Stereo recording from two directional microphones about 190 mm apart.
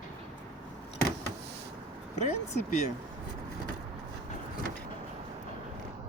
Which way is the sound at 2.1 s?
35° left (ahead or behind).